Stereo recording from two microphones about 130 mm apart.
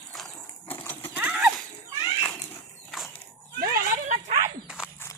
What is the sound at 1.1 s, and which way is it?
Horse, 10° right (ahead or behind).